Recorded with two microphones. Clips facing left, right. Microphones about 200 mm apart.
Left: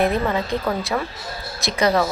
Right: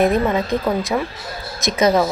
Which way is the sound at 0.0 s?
20° right (ahead or behind).